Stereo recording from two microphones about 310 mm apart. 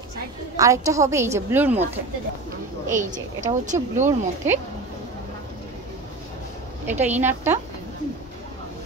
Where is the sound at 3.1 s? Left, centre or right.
Right.